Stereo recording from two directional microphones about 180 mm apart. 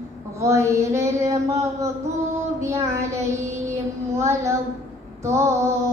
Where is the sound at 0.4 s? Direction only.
15° right (ahead or behind).